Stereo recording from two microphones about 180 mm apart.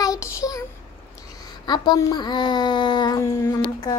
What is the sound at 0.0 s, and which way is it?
Child singing, 20° left (ahead or behind).